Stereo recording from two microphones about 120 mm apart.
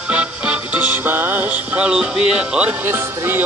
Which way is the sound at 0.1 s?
10° right (ahead or behind).